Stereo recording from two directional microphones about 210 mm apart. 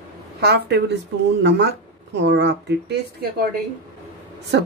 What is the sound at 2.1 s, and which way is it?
Speech, 55° right (ahead or behind).